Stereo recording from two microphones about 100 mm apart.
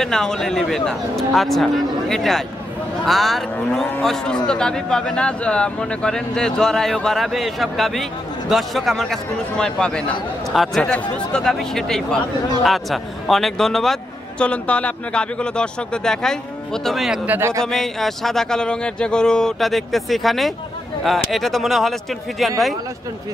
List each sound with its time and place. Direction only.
0.0 s speech: 5° left (ahead or behind)
10.5 s speech: centre (ahead or behind)
10.8 s speech: 10° left (ahead or behind)
17.3 s speech: 25° right (ahead or behind)
17.6 s speech: 5° left (ahead or behind)